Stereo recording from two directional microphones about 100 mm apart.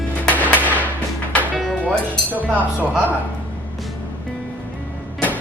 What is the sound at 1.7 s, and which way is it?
Music, 10° left (ahead or behind).